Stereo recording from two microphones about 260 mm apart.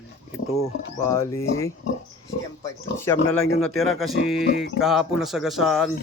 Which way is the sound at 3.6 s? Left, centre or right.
Centre.